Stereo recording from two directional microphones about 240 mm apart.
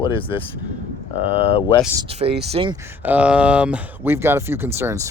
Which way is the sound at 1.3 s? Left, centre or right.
Left.